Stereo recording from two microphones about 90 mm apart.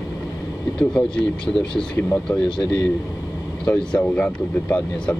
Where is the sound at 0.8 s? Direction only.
5° left (ahead or behind).